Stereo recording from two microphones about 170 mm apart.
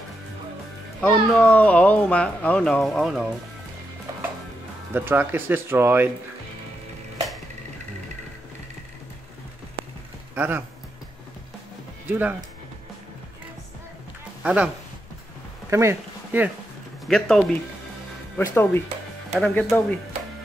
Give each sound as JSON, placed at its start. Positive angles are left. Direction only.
{"t": 1.0, "sound": "speech", "side_deg": 10}
{"t": 4.9, "sound": "speech", "side_deg": -10}
{"t": 10.3, "sound": "speech", "side_deg": -10}
{"t": 12.1, "sound": "speech", "side_deg": -10}
{"t": 14.4, "sound": "speech", "side_deg": -10}
{"t": 15.7, "sound": "speech", "side_deg": -15}
{"t": 17.0, "sound": "speech", "side_deg": 0}
{"t": 18.4, "sound": "speech", "side_deg": 15}